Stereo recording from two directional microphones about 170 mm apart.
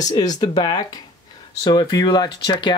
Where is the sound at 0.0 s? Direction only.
20° left (ahead or behind).